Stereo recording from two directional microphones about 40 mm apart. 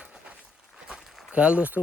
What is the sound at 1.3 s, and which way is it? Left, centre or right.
Speech, right.